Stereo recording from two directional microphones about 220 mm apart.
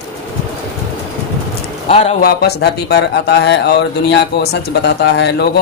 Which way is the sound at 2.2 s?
45° left (ahead or behind).